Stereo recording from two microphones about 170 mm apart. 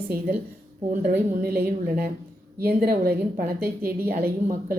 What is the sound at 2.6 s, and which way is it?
Speech, 65° right (ahead or behind).